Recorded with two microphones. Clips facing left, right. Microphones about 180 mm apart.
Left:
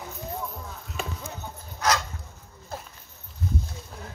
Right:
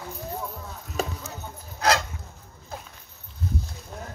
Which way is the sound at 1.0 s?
40° right (ahead or behind).